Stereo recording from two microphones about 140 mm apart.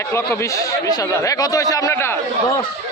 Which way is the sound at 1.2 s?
25° left (ahead or behind).